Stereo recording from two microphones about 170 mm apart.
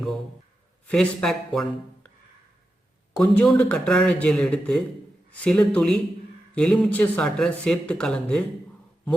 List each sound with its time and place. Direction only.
0.9 s speech: centre (ahead or behind)
3.2 s speech: 10° left (ahead or behind)